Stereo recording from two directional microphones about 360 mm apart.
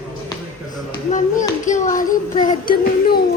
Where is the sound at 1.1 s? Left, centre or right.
Left.